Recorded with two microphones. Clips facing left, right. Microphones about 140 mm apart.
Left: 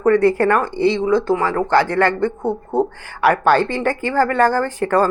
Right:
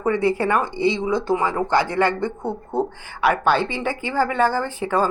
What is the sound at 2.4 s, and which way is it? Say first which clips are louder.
Speech: left 5 dB; 25° left (ahead or behind).